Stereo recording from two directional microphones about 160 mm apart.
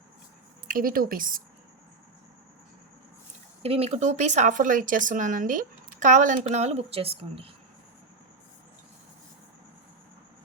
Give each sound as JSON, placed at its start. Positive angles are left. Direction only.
{"t": 0.7, "sound": "a woman's voice", "side_deg": -60}
{"t": 3.6, "sound": "speech", "side_deg": -40}